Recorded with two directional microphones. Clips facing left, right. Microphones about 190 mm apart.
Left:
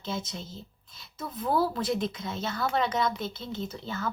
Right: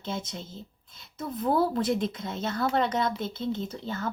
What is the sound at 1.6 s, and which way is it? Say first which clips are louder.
Speech: right 2 dB; 50° right (ahead or behind).